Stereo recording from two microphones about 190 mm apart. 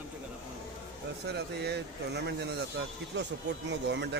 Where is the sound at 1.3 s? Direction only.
60° right (ahead or behind).